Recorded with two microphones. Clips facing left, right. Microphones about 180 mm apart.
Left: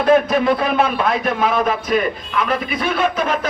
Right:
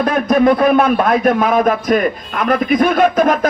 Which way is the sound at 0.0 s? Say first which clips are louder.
Right 2 dB; 50° right (ahead or behind).